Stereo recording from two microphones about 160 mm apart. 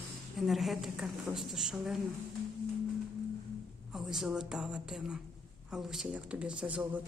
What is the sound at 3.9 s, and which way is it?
A woman's voice, 5° right (ahead or behind).